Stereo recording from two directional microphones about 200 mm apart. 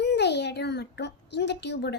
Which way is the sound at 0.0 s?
60° left (ahead or behind).